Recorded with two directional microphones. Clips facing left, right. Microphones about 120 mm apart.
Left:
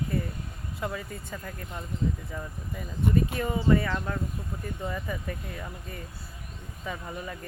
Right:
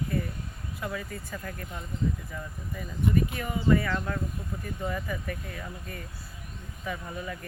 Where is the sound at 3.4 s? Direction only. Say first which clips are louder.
Left 1 dB; 25° left (ahead or behind).